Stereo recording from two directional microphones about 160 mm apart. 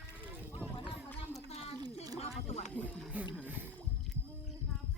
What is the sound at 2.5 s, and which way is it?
Music, 45° left (ahead or behind).